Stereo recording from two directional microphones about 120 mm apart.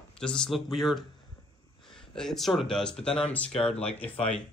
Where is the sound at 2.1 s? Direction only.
5° left (ahead or behind).